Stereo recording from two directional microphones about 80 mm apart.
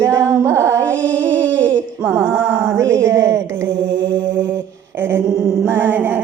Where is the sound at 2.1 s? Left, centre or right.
Right.